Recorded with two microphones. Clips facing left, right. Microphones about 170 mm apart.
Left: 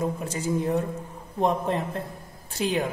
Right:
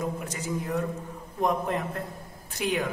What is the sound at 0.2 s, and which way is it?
Speech, 30° left (ahead or behind).